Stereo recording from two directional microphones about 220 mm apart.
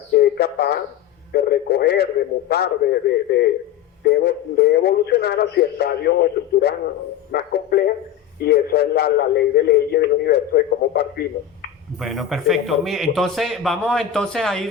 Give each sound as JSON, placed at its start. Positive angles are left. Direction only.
{"t": 0.1, "sound": "a sound", "side_deg": 45}
{"t": 1.3, "sound": "a man's voice", "side_deg": 45}
{"t": 11.9, "sound": "a man's voice", "side_deg": 0}